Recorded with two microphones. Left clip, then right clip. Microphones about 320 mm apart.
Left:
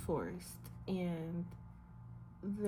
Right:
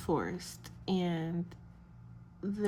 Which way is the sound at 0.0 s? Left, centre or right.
Right.